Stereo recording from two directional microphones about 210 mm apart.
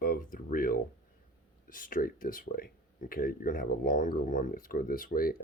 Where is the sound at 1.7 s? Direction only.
40° left (ahead or behind).